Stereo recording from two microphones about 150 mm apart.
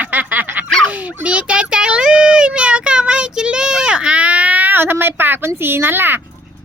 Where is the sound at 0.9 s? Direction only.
10° right (ahead or behind).